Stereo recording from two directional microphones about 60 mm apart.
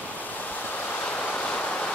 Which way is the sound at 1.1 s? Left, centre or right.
Left.